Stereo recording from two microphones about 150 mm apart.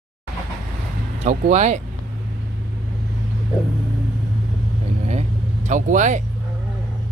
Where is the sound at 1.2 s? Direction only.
50° right (ahead or behind).